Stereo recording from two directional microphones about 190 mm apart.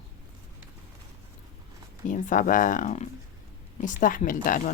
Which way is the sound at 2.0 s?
40° left (ahead or behind).